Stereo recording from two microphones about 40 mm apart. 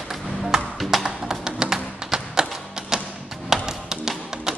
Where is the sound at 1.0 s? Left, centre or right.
Centre.